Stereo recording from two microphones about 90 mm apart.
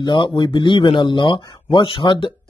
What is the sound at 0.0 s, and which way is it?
Speech, 65° left (ahead or behind).